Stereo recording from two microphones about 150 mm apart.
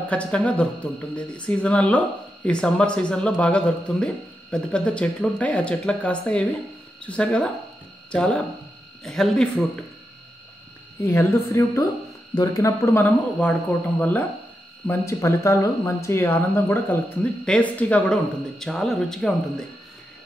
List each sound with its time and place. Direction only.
0.1 s a woman's voice: 10° left (ahead or behind)
11.0 s a woman's voice: 20° left (ahead or behind); by 19.6 s 5° left (ahead or behind)